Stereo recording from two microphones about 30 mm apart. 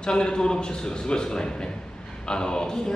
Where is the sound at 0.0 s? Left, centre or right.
Left.